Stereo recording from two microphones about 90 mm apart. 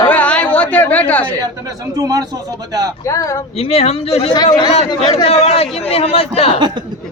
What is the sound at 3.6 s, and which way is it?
Speech, 90° left.